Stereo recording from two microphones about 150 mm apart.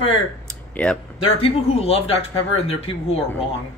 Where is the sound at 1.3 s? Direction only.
40° left (ahead or behind).